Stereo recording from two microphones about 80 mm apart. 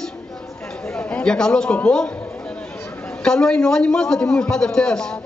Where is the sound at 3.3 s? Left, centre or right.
Centre.